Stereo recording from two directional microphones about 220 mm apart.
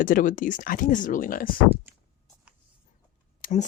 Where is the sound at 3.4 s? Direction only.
30° left (ahead or behind).